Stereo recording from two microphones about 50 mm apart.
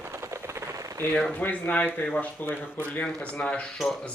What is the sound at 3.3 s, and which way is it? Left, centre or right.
Speech, left.